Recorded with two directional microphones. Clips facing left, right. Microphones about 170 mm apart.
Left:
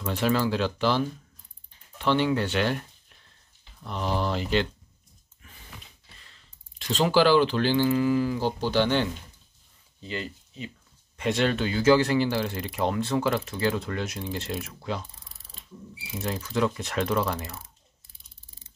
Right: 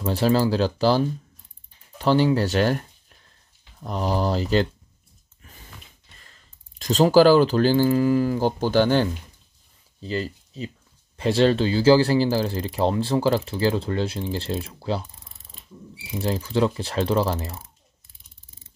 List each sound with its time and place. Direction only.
0.0 s speech: 35° right (ahead or behind)
3.8 s speech: 40° right (ahead or behind)
6.1 s speech: 45° right (ahead or behind)
16.2 s speech: 30° right (ahead or behind)